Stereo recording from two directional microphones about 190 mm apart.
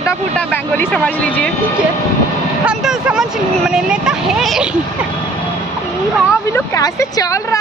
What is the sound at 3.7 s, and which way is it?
Speech, 5° right (ahead or behind).